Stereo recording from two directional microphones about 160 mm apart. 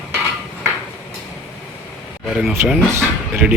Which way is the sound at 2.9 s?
15° right (ahead or behind).